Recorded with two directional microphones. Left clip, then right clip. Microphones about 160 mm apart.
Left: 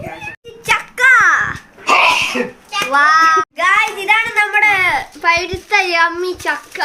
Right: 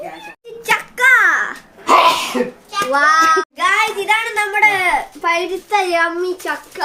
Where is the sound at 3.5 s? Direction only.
10° right (ahead or behind).